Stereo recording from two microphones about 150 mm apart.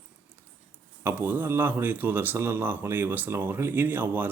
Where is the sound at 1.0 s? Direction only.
15° right (ahead or behind).